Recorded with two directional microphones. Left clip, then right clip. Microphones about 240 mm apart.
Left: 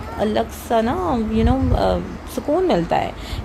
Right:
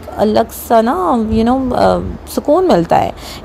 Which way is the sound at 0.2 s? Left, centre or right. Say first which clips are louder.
Right 8 dB; right.